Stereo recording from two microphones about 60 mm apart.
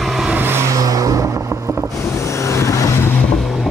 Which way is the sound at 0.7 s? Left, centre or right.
Right.